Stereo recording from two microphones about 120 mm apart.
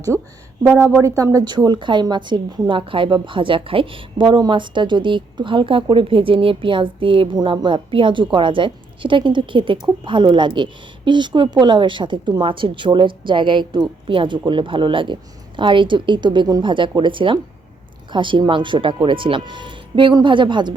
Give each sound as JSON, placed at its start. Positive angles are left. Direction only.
{"t": 0.1, "sound": "speech", "side_deg": -5}
{"t": 0.6, "sound": "speech", "side_deg": -20}
{"t": 1.5, "sound": "a woman's voice", "side_deg": -40}